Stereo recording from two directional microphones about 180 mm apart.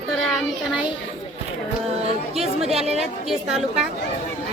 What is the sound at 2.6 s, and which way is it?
Speech, 35° right (ahead or behind).